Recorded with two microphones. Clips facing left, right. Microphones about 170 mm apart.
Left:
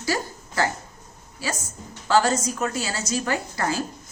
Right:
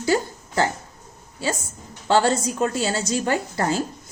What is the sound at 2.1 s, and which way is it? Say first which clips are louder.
A woman's voice: right 1 dB; 30° right (ahead or behind).